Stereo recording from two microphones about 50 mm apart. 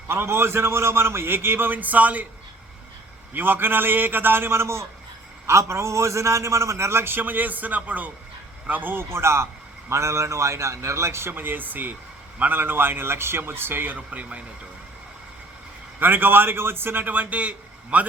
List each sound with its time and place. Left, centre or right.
0.1 s a man's voice: right
3.3 s a man's voice: right
5.5 s a man's voice: right
9.0 s a man's voice: right
9.9 s a man's voice: right
11.3 s a man's voice: right
16.0 s a man's voice: right